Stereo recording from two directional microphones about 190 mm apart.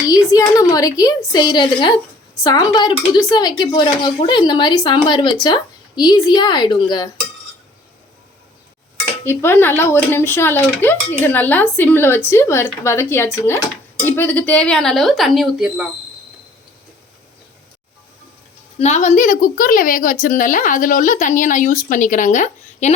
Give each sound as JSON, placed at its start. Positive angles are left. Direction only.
{"t": 0.1, "sound": "speech", "side_deg": 15}
{"t": 9.2, "sound": "speech", "side_deg": 15}
{"t": 18.8, "sound": "speech", "side_deg": 35}